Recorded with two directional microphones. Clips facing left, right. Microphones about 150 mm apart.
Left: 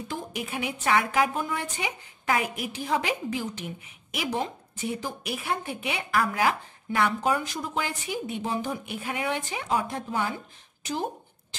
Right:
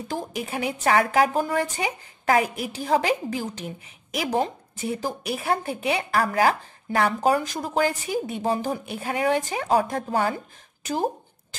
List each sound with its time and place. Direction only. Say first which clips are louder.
0.1 s a woman's voice: right 5 dB; 35° right (ahead or behind)